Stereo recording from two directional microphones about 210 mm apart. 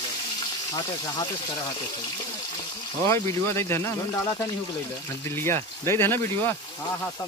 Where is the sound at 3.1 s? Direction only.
10° left (ahead or behind).